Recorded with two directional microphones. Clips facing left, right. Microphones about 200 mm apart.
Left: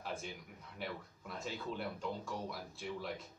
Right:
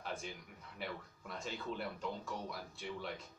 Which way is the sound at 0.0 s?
Centre (ahead or behind).